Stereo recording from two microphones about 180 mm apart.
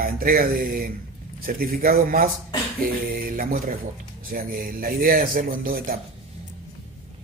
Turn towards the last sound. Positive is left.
turn(degrees=-55)  # may be behind; listen again after turning